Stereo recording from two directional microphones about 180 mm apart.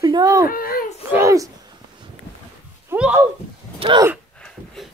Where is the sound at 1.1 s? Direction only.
15° right (ahead or behind).